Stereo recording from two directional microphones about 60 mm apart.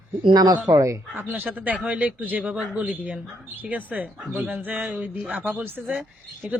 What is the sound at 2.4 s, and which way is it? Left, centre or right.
Speech, centre.